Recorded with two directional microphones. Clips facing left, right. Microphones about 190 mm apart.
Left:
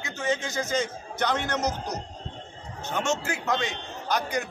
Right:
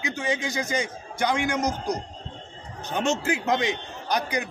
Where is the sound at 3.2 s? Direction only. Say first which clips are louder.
Right 4 dB; 20° right (ahead or behind).